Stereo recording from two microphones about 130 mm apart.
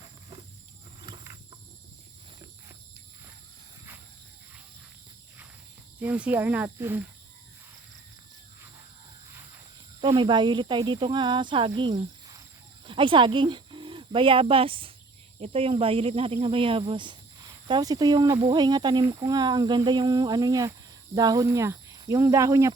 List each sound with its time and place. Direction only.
6.0 s speech: 10° right (ahead or behind)
10.0 s speech: 35° right (ahead or behind)